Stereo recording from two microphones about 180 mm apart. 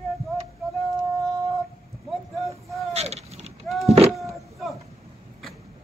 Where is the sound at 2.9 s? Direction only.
35° right (ahead or behind).